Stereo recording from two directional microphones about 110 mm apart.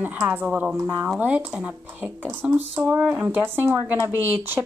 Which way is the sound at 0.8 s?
25° right (ahead or behind).